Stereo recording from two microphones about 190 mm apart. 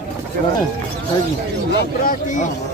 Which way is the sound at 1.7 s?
50° left (ahead or behind).